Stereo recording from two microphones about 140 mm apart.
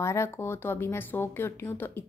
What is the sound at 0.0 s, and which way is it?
Speech, 20° left (ahead or behind).